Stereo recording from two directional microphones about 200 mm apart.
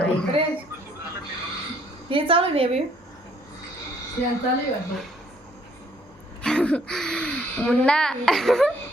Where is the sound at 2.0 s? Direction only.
25° right (ahead or behind).